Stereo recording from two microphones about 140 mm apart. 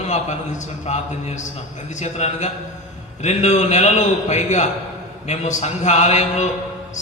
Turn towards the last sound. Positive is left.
turn(degrees=55)  # may be behind; listen again after turning